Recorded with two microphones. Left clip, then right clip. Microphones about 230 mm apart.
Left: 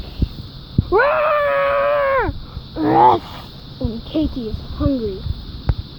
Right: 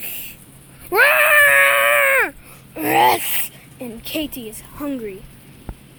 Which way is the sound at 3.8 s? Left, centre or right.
Centre.